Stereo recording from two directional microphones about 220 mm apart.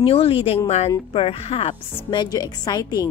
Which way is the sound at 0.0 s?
25° left (ahead or behind).